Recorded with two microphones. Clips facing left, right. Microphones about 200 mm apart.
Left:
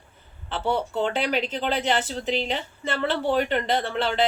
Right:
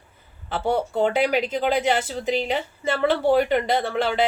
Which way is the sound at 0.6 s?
45° right (ahead or behind).